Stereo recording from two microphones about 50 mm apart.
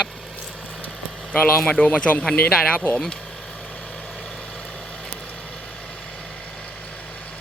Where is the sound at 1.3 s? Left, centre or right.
Left.